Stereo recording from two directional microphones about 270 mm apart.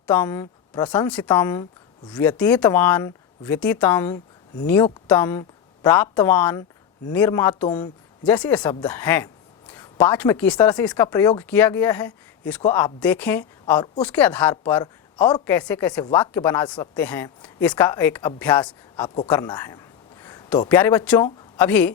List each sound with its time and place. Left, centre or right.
0.1 s speech: centre
19.0 s speech: centre